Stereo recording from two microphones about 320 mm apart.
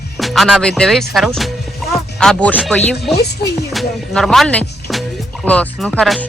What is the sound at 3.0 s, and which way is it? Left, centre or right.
Speech, left.